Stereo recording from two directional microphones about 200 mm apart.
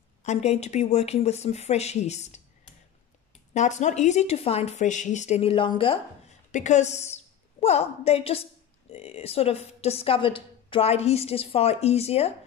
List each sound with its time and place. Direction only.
0.2 s a woman's voice: 35° left (ahead or behind)
6.5 s a woman's voice: 35° left (ahead or behind)